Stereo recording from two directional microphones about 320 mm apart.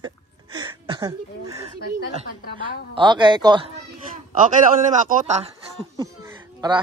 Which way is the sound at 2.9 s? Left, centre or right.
Centre.